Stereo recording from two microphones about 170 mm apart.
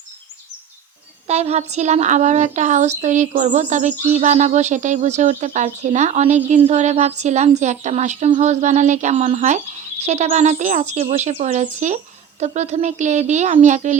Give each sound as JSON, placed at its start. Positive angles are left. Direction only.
{"t": 1.3, "sound": "a woman's voice", "side_deg": -40}